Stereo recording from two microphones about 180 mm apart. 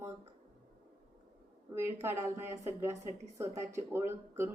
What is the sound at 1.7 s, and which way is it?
Speech, 15° right (ahead or behind).